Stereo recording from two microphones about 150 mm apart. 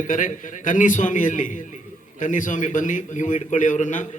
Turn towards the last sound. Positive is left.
turn(degrees=55)  # may be behind; listen again after turning